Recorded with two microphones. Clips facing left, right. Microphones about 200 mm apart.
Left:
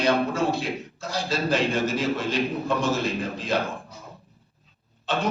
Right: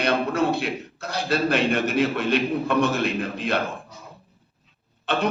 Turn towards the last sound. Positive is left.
turn(degrees=-60)  # may be behind; listen again after turning